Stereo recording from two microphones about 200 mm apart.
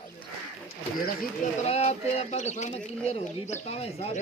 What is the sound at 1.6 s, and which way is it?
Speech, 30° left (ahead or behind).